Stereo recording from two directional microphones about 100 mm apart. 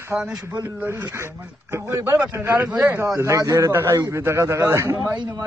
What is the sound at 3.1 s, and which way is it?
A man's voice, 30° right (ahead or behind).